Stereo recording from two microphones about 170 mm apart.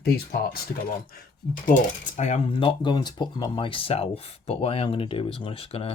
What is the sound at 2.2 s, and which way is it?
Speech, 40° left (ahead or behind).